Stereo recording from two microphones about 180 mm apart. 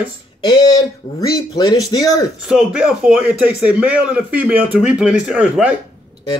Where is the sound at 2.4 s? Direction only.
5° right (ahead or behind).